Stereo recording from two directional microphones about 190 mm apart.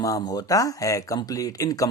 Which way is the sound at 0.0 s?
20° left (ahead or behind).